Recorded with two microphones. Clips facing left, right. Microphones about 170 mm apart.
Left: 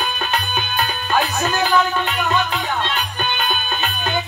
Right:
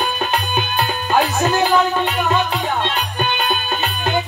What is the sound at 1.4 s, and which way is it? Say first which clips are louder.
Music: right 3 dB; 20° right (ahead or behind).